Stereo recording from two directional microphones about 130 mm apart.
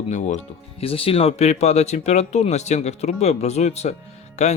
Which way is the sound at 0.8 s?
45° left (ahead or behind).